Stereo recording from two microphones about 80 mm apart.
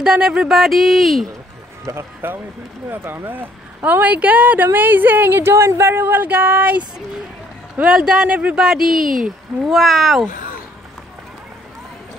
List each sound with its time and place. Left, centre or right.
0.0 s speech: centre
1.9 s speech: right; by 10.2 s centre